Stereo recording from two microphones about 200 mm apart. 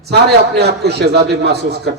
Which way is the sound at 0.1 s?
55° right (ahead or behind).